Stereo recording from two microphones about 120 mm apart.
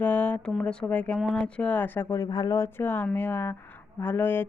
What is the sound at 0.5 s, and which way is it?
Speech, 5° left (ahead or behind).